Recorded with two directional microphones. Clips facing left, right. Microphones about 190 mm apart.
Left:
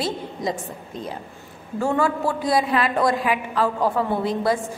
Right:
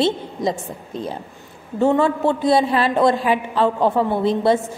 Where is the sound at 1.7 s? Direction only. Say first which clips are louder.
Right 5 dB; 25° right (ahead or behind).